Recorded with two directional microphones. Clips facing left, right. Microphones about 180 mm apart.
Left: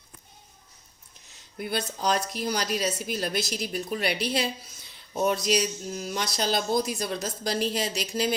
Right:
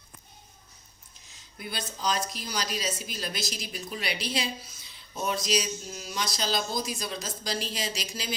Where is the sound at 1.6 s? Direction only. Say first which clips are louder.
Left 6 dB; 55° left (ahead or behind).